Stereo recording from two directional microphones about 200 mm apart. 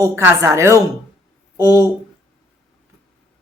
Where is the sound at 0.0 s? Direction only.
15° right (ahead or behind).